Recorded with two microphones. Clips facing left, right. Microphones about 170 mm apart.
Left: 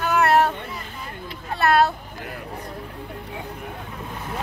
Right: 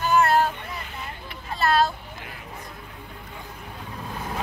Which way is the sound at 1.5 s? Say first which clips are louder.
Left 3 dB; 65° left (ahead or behind).